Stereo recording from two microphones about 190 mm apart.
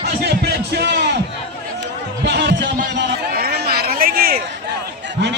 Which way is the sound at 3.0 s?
55° right (ahead or behind).